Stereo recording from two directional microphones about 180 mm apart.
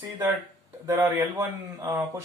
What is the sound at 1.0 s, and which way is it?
Speech, 15° right (ahead or behind).